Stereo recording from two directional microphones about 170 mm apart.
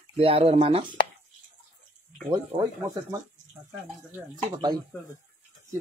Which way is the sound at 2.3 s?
15° right (ahead or behind).